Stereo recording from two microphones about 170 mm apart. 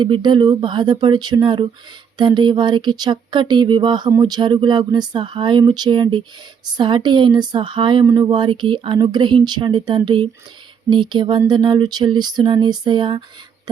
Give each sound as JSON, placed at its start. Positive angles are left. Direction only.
{"t": 0.0, "sound": "speech", "side_deg": -25}